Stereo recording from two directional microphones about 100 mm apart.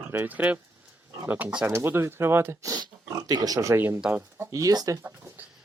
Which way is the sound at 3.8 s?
20° right (ahead or behind).